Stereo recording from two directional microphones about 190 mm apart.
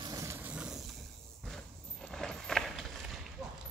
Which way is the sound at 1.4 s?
5° left (ahead or behind).